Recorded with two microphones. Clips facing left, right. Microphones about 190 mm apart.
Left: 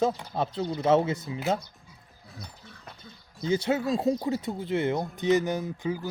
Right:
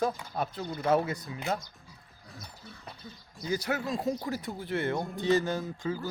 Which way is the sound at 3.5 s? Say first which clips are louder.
Left 6 dB; 25° left (ahead or behind).